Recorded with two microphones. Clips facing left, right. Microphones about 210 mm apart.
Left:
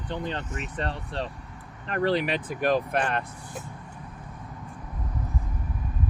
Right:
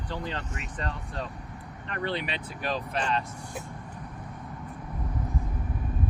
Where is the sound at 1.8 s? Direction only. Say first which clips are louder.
Left 7 dB; 40° left (ahead or behind); by 3.2 s 55° left (ahead or behind).